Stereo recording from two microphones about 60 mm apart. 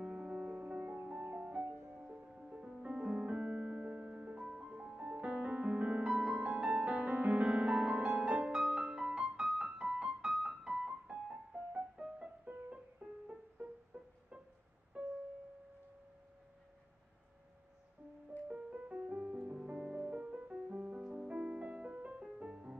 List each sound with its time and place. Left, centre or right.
0.0 s music: centre
9.7 s keyboard: centre
12.4 s music: right
13.0 s music: centre
18.5 s music: right